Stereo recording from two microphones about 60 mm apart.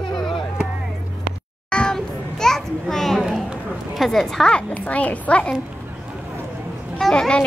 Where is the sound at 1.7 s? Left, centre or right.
Centre.